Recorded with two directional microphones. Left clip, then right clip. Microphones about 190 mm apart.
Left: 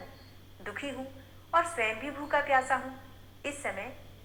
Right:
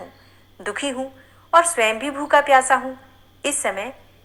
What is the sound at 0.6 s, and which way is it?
A woman's voice, 50° right (ahead or behind).